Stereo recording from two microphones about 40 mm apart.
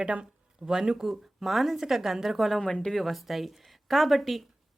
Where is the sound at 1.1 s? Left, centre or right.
Centre.